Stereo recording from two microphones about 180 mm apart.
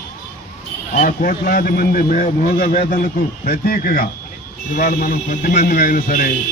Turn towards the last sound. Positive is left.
turn(degrees=50)  # may be behind; listen again after turning